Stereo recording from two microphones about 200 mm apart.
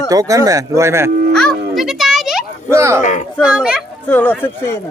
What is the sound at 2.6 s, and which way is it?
Speech, 15° right (ahead or behind).